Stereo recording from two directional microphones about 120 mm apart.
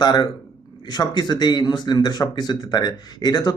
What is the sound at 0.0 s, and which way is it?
Speech, 35° left (ahead or behind).